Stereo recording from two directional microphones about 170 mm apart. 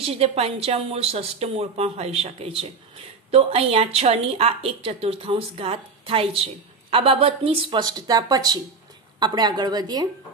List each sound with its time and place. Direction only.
0.0 s a woman's voice: 35° right (ahead or behind)